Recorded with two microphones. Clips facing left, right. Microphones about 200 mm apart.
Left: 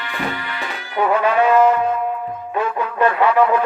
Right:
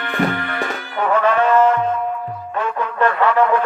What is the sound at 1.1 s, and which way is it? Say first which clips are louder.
Music: even; 10° left (ahead or behind).